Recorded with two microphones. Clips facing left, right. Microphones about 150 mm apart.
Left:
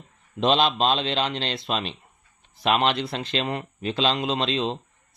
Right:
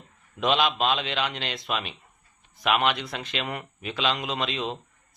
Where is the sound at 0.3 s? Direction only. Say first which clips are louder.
Left 3 dB; 30° left (ahead or behind).